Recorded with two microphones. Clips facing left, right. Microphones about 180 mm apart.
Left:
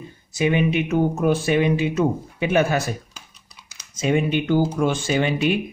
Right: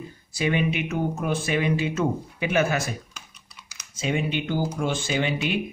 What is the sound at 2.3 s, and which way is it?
Speech, 30° left (ahead or behind).